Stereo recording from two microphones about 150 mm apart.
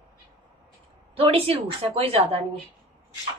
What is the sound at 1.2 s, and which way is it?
A woman's voice, 40° right (ahead or behind).